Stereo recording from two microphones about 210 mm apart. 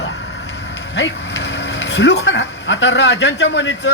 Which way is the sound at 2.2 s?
60° left (ahead or behind).